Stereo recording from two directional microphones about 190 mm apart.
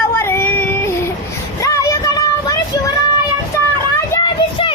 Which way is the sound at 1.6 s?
15° left (ahead or behind).